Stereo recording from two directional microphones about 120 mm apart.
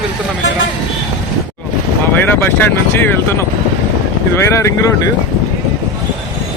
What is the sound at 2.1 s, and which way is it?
Speech, 15° left (ahead or behind).